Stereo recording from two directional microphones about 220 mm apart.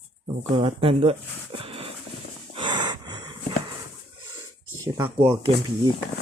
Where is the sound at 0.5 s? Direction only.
25° right (ahead or behind).